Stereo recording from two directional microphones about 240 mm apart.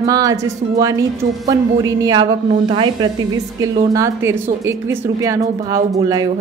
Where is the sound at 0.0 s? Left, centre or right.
Centre.